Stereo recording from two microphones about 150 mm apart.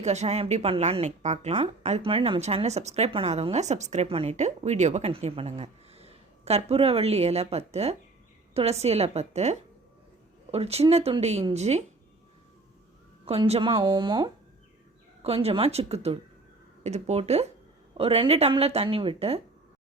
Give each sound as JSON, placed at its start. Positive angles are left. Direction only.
{"t": 0.0, "sound": "speech", "side_deg": -50}
{"t": 13.2, "sound": "a woman's voice", "side_deg": -40}
{"t": 15.2, "sound": "a woman's voice", "side_deg": -40}